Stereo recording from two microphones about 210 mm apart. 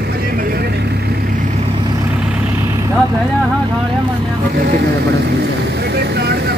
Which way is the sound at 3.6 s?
25° right (ahead or behind).